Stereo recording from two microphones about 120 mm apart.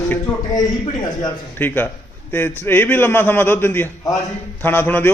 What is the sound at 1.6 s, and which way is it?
A man's voice, 15° left (ahead or behind).